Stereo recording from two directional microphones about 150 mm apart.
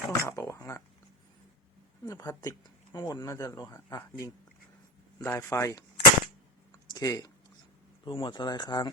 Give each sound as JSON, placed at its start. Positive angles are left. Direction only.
{"t": 0.1, "sound": "speech", "side_deg": 20}
{"t": 2.0, "sound": "speech", "side_deg": 20}
{"t": 6.9, "sound": "speech", "side_deg": 25}